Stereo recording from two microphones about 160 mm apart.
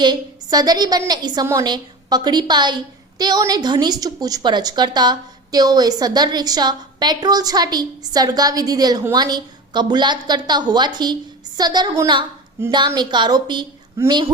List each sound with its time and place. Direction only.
0.0 s a woman's voice: 25° right (ahead or behind)
14.0 s a woman's voice: 15° right (ahead or behind)